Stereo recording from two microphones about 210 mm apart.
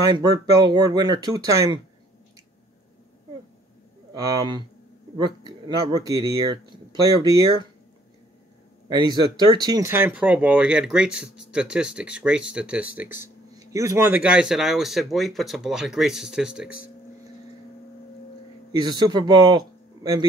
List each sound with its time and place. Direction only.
0.1 s speech: 20° right (ahead or behind)
5.1 s speech: 20° right (ahead or behind)
8.8 s speech: 20° right (ahead or behind)
13.0 s speech: 40° left (ahead or behind)
13.6 s speech: 15° right (ahead or behind)
18.7 s speech: 20° right (ahead or behind)